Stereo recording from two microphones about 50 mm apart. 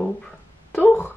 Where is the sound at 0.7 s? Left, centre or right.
Left.